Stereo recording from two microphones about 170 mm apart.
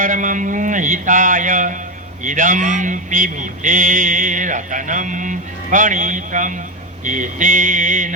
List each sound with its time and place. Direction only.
0.0 s speech: 50° right (ahead or behind)